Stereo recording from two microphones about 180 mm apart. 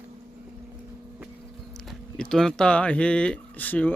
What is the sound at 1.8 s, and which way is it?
Speech, 5° left (ahead or behind).